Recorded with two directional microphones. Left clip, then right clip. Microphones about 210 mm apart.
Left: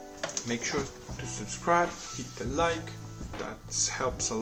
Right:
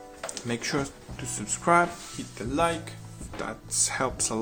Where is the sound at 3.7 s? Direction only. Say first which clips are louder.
Right 2 dB; 55° right (ahead or behind).